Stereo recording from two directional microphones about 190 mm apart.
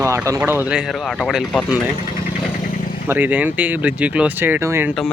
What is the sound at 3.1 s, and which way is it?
Speech, 10° right (ahead or behind).